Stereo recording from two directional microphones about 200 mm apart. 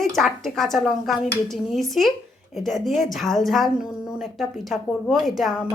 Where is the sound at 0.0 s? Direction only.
Centre (ahead or behind).